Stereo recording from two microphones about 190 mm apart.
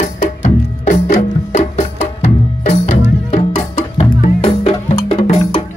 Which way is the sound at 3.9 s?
30° left (ahead or behind).